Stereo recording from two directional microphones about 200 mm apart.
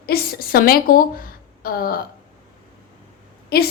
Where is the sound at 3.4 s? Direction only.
50° left (ahead or behind).